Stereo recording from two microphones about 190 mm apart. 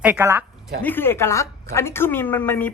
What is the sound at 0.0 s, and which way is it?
Speech, 10° right (ahead or behind).